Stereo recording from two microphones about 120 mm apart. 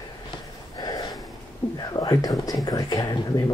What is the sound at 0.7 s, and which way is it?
Gasp, 35° left (ahead or behind).